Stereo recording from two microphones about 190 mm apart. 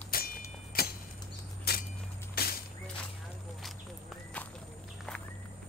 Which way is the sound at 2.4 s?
55° left (ahead or behind).